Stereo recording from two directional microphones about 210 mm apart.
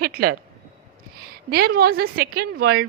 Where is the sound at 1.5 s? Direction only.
45° right (ahead or behind).